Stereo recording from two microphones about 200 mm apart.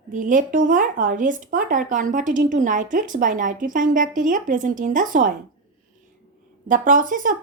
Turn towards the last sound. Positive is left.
turn(degrees=-40)  # may be behind; listen again after turning